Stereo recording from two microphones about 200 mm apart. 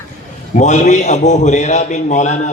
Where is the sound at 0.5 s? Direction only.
35° left (ahead or behind).